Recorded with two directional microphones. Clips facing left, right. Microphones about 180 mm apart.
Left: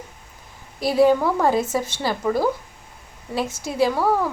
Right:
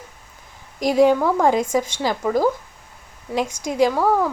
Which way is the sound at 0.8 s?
15° right (ahead or behind).